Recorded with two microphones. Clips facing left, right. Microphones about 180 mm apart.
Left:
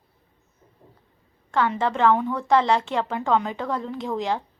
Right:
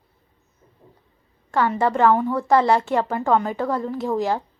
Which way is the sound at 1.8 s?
10° right (ahead or behind).